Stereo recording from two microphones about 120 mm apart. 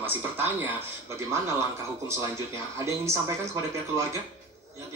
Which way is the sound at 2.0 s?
25° right (ahead or behind).